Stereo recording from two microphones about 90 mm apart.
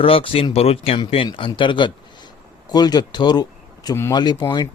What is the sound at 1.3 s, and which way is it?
Speech, 70° left (ahead or behind).